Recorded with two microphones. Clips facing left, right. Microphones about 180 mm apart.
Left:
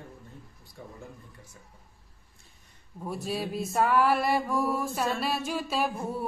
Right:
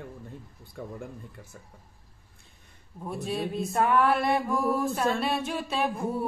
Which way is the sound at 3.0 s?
Centre (ahead or behind).